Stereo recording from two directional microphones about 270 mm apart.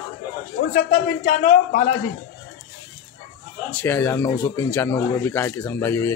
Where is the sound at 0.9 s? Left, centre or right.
Left.